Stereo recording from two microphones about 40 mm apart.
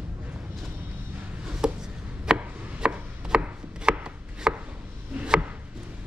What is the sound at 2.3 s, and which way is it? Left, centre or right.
Chopping, centre.